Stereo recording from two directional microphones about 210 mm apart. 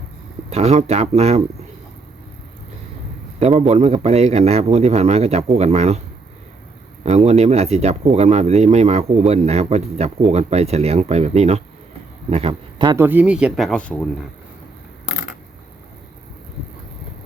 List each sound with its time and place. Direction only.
0.5 s speech: 30° right (ahead or behind)
3.4 s speech: 30° right (ahead or behind)
7.0 s speech: 30° right (ahead or behind); by 14.3 s 5° left (ahead or behind)